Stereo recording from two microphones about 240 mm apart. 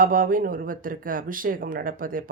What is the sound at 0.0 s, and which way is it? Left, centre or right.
Speech, right.